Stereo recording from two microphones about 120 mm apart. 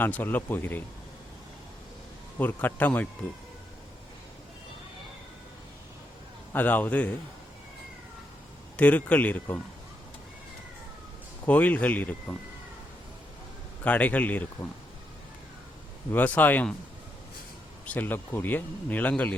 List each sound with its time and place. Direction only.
0.0 s speech: 15° left (ahead or behind)
2.4 s speech: 15° left (ahead or behind)
6.5 s speech: 15° left (ahead or behind)
8.7 s speech: 10° left (ahead or behind)
11.4 s speech: 15° left (ahead or behind)
13.8 s speech: 10° left (ahead or behind)
16.1 s speech: 15° left (ahead or behind)
17.8 s speech: 15° left (ahead or behind)